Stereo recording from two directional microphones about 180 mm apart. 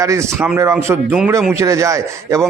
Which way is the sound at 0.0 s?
15° right (ahead or behind).